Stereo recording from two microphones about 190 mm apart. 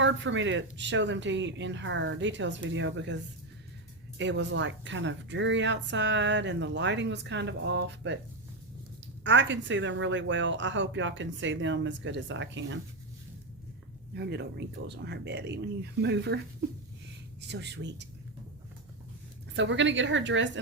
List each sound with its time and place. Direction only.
0.0 s speech: 75° right (ahead or behind)
4.2 s speech: 70° right (ahead or behind)
9.2 s speech: 70° right (ahead or behind)
14.1 s speech: 60° right (ahead or behind)
17.5 s speech: 65° right (ahead or behind)
19.5 s speech: 70° right (ahead or behind)